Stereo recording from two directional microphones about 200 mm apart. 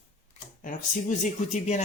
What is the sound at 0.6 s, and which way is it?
Speech, 40° left (ahead or behind).